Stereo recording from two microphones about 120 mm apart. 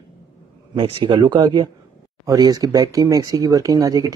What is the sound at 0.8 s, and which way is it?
Speech, 40° right (ahead or behind).